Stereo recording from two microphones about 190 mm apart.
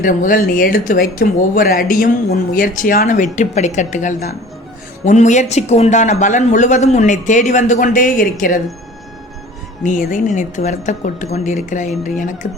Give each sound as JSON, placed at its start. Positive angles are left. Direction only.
{"t": 0.0, "sound": "a man's voice", "side_deg": 45}
{"t": 9.8, "sound": "a man's voice", "side_deg": 45}